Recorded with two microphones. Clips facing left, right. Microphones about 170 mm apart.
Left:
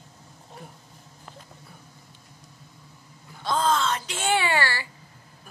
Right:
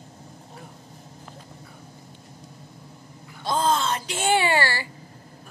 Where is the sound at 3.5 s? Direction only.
30° right (ahead or behind).